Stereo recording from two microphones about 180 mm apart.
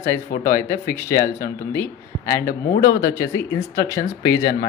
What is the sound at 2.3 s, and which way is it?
Speech, 50° left (ahead or behind).